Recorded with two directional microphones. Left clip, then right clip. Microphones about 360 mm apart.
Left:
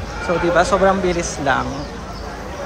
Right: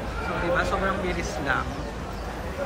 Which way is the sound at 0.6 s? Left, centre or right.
Centre.